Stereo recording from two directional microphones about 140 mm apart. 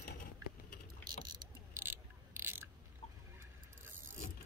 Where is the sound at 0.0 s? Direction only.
80° left.